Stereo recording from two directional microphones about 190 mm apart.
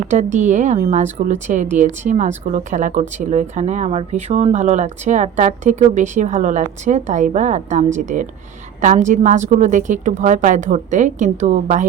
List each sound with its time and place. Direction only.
0.1 s speech: 40° right (ahead or behind)